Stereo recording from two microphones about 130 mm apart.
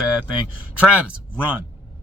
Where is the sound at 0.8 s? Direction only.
10° right (ahead or behind).